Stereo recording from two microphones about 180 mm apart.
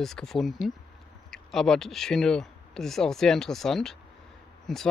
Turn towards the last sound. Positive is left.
turn(degrees=0)  # may be behind; listen again after turning